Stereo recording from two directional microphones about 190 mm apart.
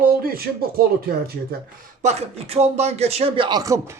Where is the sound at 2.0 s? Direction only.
35° right (ahead or behind).